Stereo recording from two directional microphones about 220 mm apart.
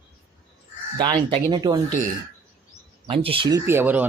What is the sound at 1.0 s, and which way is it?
Speech, 20° right (ahead or behind).